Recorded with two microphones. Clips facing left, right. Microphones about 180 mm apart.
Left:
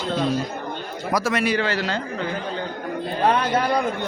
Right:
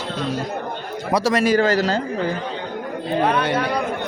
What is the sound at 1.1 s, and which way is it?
A man's voice, 35° right (ahead or behind).